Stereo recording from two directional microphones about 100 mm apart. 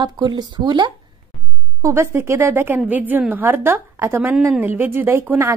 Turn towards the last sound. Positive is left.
turn(degrees=-25)  # may be behind; listen again after turning